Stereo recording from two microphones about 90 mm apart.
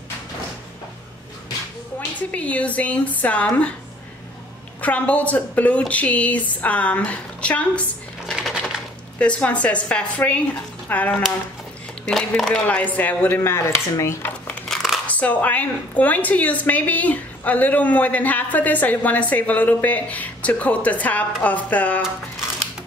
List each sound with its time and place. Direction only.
2.0 s a woman's voice: 15° left (ahead or behind)
4.8 s a woman's voice: 15° left (ahead or behind)
8.5 s a sound: centre (ahead or behind)
9.2 s a woman's voice: 15° left (ahead or behind)
12.1 s a woman's voice: 5° left (ahead or behind); by 14.3 s 30° left (ahead or behind)
14.7 s a sound: centre (ahead or behind)
15.0 s a woman's voice: 15° left (ahead or behind)